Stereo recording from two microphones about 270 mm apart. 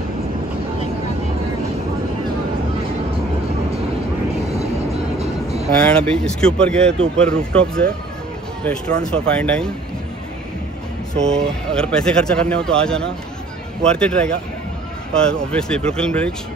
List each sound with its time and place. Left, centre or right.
5.2 s music: right
5.7 s speech: centre
11.1 s speech: centre